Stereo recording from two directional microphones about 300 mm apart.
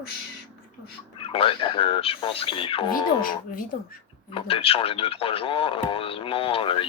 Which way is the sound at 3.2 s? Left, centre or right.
Left.